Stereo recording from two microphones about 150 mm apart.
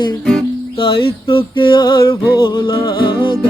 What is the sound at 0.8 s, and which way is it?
Music, 35° left (ahead or behind).